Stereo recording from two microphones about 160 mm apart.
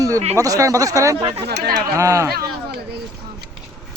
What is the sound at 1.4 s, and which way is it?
Speech, 85° right.